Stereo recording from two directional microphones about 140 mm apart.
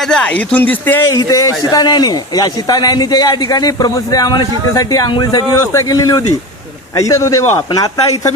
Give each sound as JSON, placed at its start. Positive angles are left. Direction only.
{"t": 0.0, "sound": "speech", "side_deg": 5}
{"t": 1.0, "sound": "a man's voice", "side_deg": 25}